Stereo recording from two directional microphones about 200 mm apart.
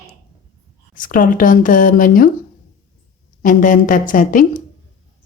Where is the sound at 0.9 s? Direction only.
40° left (ahead or behind).